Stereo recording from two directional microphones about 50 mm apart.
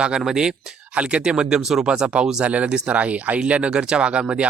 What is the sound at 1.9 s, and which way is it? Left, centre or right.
Speech, right.